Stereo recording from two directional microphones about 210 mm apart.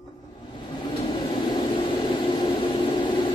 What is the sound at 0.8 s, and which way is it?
Vehicle, 20° left (ahead or behind).